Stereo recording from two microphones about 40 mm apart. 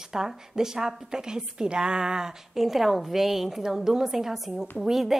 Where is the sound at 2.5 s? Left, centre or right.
Centre.